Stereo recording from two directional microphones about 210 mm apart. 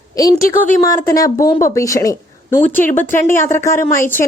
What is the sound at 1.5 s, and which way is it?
Speech, 40° left (ahead or behind).